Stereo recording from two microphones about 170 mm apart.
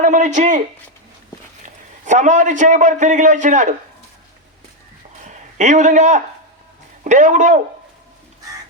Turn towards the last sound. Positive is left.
turn(degrees=-45)  # may be behind; listen again after turning